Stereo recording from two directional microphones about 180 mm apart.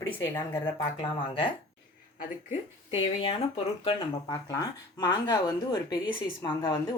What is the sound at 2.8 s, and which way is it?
Speech, 30° left (ahead or behind).